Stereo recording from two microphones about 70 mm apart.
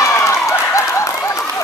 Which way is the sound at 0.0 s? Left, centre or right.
Left.